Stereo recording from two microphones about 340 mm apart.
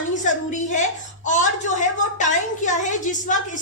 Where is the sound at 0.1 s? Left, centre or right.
Left.